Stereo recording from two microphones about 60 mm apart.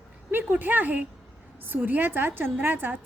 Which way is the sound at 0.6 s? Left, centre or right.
Right.